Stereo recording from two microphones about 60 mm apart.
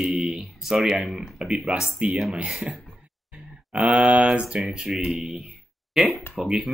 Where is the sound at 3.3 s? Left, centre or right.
Centre.